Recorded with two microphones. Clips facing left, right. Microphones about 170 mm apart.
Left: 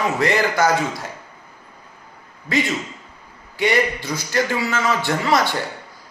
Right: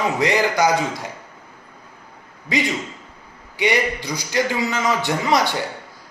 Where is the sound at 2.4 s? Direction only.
15° right (ahead or behind).